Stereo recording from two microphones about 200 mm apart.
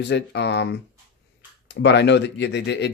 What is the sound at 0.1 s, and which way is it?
Speech, 60° left (ahead or behind).